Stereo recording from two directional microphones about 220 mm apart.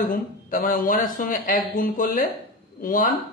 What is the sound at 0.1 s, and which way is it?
Speech, 40° left (ahead or behind).